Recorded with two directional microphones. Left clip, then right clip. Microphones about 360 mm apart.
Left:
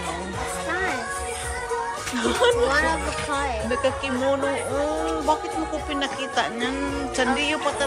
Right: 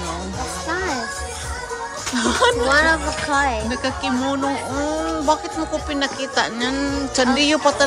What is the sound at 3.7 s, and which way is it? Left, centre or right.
Speech, centre.